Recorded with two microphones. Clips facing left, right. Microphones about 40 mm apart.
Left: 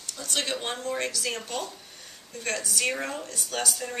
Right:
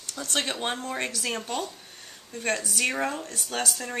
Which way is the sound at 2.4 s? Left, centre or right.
Centre.